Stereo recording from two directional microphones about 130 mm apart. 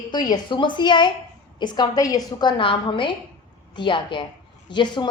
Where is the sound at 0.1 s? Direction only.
35° left (ahead or behind).